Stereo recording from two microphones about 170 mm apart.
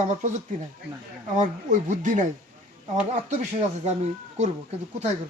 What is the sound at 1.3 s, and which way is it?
Speech, 50° right (ahead or behind).